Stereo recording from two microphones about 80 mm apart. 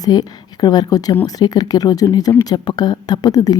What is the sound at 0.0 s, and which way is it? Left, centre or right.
Speech, left.